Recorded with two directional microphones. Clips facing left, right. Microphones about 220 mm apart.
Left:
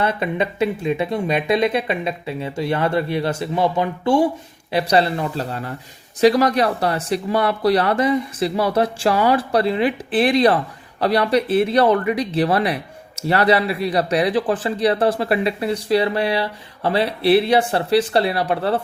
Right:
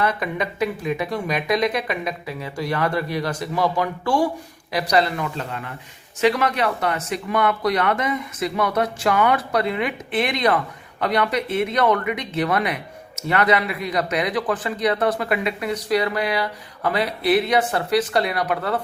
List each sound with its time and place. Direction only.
0.0 s speech: 25° left (ahead or behind)